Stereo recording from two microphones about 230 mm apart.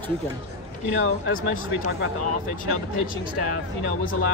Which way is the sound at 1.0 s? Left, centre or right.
Left.